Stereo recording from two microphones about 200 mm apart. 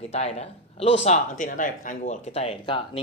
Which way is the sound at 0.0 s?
30° left (ahead or behind).